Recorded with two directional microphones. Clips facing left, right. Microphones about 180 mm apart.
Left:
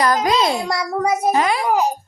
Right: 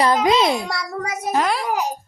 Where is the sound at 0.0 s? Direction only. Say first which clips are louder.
Right 1 dB; 25° right (ahead or behind).